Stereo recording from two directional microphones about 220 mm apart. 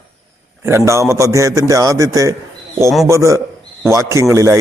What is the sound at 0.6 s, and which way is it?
A man's voice, 10° right (ahead or behind).